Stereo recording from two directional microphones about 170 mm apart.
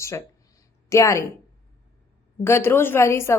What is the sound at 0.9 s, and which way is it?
Speech, 15° left (ahead or behind).